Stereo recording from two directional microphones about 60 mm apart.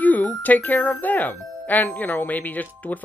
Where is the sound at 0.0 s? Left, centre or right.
Left.